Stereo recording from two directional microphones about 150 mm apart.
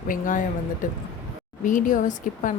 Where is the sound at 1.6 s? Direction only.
60° left (ahead or behind).